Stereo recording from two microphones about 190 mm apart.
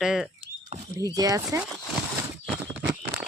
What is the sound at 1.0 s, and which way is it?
Speech, 20° right (ahead or behind).